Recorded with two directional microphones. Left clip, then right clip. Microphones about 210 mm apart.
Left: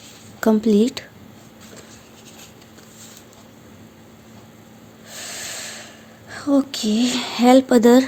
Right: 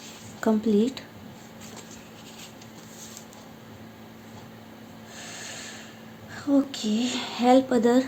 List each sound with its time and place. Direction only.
0.3 s a woman's voice: 45° left (ahead or behind)
5.1 s a sound: 55° left (ahead or behind)
6.3 s speech: 55° left (ahead or behind)